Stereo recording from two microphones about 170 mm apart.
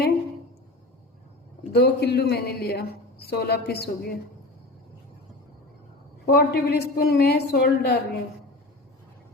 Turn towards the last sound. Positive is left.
turn(degrees=65)  # may be behind; listen again after turning